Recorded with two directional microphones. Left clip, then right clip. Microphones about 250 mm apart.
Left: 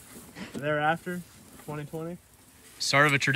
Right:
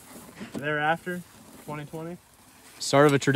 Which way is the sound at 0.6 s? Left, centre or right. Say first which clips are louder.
Right 1 dB; centre.